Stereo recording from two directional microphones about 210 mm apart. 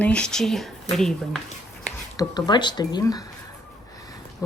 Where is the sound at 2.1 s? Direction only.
20° left (ahead or behind).